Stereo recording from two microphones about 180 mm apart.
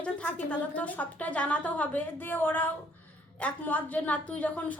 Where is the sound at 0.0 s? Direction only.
10° left (ahead or behind).